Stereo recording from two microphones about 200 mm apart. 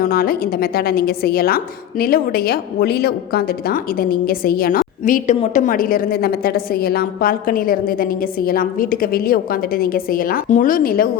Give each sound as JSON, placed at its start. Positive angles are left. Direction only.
{"t": 0.0, "sound": "a woman's voice", "side_deg": 50}